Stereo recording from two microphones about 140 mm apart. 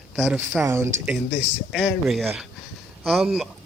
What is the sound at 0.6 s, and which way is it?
Speech, 20° right (ahead or behind).